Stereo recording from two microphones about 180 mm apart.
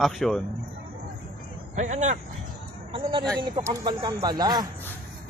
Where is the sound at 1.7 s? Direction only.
40° right (ahead or behind).